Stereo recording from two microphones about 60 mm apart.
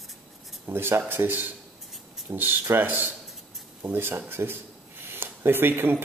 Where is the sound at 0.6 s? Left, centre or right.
Right.